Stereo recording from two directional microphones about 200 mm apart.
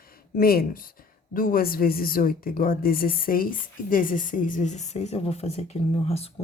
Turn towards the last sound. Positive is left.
turn(degrees=30)  # may be behind; listen again after turning